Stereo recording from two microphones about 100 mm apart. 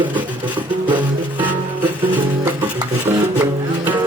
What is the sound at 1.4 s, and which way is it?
Music, 15° right (ahead or behind).